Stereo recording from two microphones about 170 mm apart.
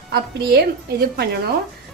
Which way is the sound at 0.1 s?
65° right (ahead or behind).